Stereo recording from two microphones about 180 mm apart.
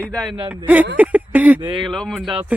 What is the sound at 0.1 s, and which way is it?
Speech, 5° left (ahead or behind).